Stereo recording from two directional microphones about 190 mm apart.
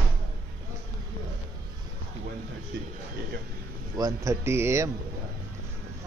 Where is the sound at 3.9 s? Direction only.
20° right (ahead or behind).